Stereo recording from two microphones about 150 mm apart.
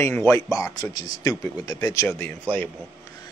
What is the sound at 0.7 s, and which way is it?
Speech, 25° left (ahead or behind).